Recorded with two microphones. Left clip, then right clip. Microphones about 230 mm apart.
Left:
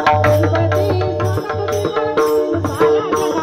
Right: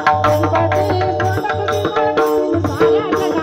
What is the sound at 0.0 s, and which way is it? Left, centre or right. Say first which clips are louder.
Music: even; left.